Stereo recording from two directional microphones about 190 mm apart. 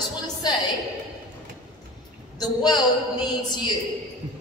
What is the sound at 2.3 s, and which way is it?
A woman's voice, 20° left (ahead or behind).